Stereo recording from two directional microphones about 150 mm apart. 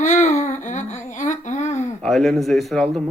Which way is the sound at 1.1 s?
55° left (ahead or behind).